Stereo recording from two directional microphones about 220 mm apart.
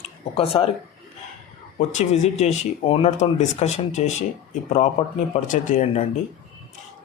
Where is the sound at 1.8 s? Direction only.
30° left (ahead or behind).